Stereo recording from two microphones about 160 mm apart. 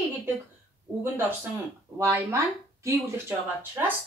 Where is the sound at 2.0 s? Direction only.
20° right (ahead or behind).